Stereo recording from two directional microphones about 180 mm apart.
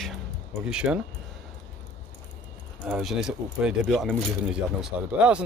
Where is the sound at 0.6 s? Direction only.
5° right (ahead or behind).